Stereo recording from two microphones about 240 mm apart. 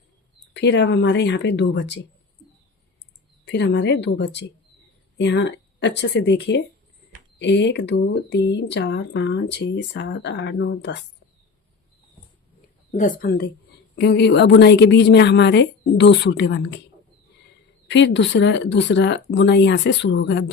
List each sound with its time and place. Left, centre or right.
0.5 s speech: left
3.4 s speech: left
12.9 s speech: left
17.8 s speech: left